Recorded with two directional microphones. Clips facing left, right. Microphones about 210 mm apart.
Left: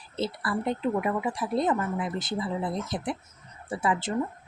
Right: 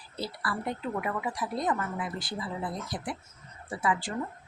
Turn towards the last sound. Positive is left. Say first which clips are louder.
# left 3 dB
turn(degrees=25)  # may be behind; listen again after turning